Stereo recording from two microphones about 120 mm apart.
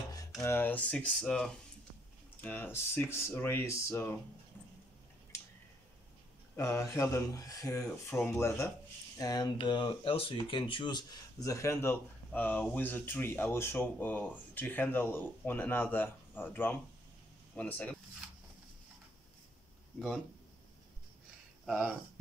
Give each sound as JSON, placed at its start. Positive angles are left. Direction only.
{"t": 0.4, "sound": "speech", "side_deg": 20}
{"t": 2.4, "sound": "speech", "side_deg": 15}
{"t": 6.5, "sound": "speech", "side_deg": 20}
{"t": 9.2, "sound": "speech", "side_deg": 35}
{"t": 21.6, "sound": "speech", "side_deg": -10}